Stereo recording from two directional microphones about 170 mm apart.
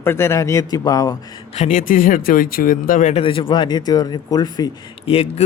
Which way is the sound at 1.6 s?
50° left (ahead or behind).